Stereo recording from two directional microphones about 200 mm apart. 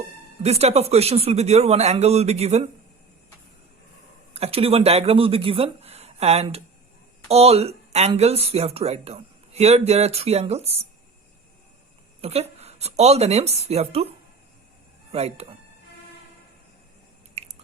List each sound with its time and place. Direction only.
0.4 s speech: 30° right (ahead or behind)
4.4 s speech: 30° right (ahead or behind)
12.2 s speech: 30° right (ahead or behind)
15.1 s speech: 30° right (ahead or behind)
17.4 s chewing: 30° right (ahead or behind)